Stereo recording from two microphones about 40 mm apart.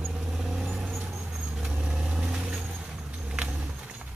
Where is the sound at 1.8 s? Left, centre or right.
Centre.